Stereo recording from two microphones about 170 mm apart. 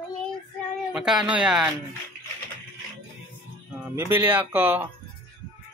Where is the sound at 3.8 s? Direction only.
15° right (ahead or behind).